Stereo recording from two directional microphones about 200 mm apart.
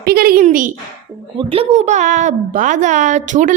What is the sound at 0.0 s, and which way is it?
Speech, 50° right (ahead or behind).